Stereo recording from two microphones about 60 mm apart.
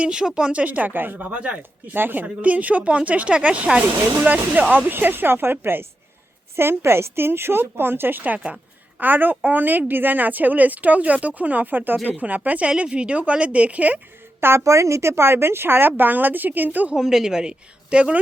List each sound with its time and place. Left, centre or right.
0.0 s a woman's voice: centre; by 1.3 s right
1.3 s a woman's voice: right
4.9 s speech: right
8.2 s a woman's voice: right
14.6 s speech: right
16.9 s a woman's voice: centre